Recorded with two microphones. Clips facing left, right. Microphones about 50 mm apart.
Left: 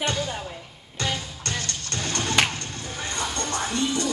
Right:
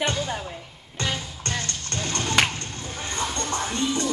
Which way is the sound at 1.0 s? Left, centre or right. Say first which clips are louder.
Even; right.